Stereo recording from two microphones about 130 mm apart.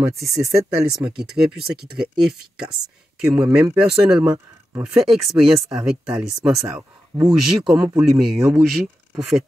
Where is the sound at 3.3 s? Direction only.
5° right (ahead or behind).